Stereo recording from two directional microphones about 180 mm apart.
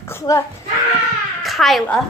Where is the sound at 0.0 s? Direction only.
15° left (ahead or behind).